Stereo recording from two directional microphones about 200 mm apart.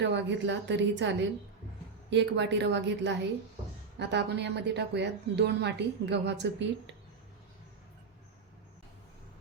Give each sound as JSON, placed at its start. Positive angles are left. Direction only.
{"t": 0.0, "sound": "a woman's voice", "side_deg": -60}